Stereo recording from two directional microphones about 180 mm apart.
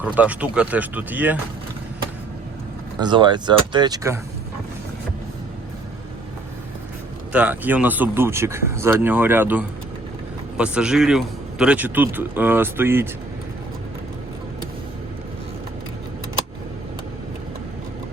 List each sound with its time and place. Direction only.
0.0 s a man's voice: 10° right (ahead or behind)
3.0 s speech: 25° right (ahead or behind)
7.3 s a man's voice: 10° right (ahead or behind)